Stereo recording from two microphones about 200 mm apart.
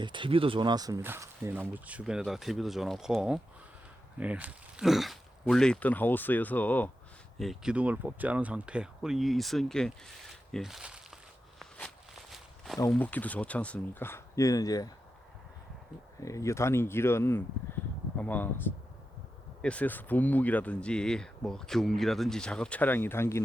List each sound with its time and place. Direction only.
0.0 s speech: 25° right (ahead or behind); by 11.0 s 5° right (ahead or behind)
12.3 s walk: centre (ahead or behind)
12.9 s speech: 10° left (ahead or behind)
16.2 s speech: 15° left (ahead or behind)